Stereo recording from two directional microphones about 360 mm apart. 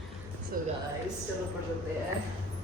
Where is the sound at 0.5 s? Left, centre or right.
Right.